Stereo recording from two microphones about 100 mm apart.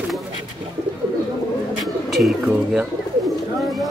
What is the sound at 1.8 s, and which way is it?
Bird, centre (ahead or behind).